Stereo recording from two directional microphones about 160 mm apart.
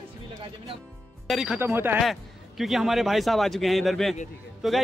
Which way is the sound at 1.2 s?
5° right (ahead or behind).